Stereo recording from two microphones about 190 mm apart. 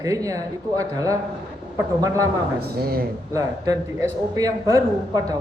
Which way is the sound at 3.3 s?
15° right (ahead or behind).